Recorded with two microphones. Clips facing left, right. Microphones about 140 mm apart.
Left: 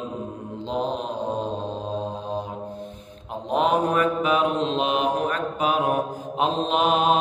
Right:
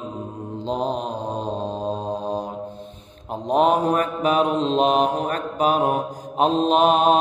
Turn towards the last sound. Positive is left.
turn(degrees=-40)  # may be behind; listen again after turning